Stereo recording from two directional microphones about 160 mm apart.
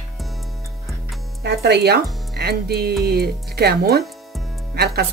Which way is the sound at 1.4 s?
90° right.